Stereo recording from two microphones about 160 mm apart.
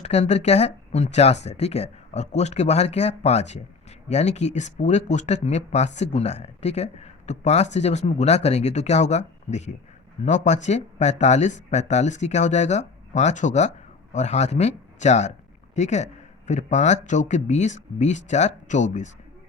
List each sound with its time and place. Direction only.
0.0 s speech: 45° left (ahead or behind)